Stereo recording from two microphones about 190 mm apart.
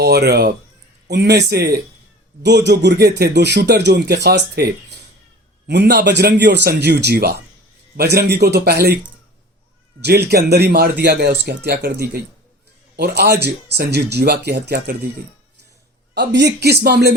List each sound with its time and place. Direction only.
0.0 s speech: 60° right (ahead or behind)
10.0 s speech: 60° right (ahead or behind)
16.1 s speech: 65° right (ahead or behind)